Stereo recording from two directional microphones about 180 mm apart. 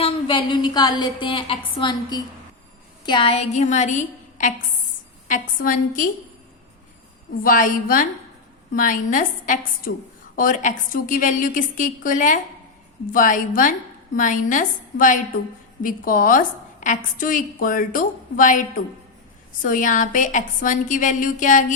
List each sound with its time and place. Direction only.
0.0 s a woman's voice: 25° left (ahead or behind); by 6.1 s 50° left (ahead or behind)
7.4 s a woman's voice: 50° left (ahead or behind)
19.6 s a woman's voice: 50° left (ahead or behind)